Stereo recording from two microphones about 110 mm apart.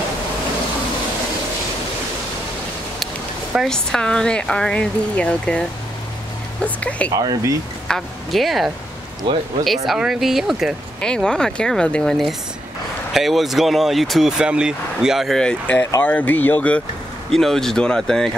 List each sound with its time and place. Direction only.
3.6 s speech: 5° left (ahead or behind)
7.2 s speech: 35° right (ahead or behind)
7.9 s speech: centre (ahead or behind)
9.3 s speech: 50° right (ahead or behind)
9.8 s speech: centre (ahead or behind)
11.0 s speech: 5° left (ahead or behind)